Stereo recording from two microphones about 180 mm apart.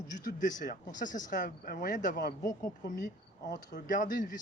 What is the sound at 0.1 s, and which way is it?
Speech, 45° left (ahead or behind).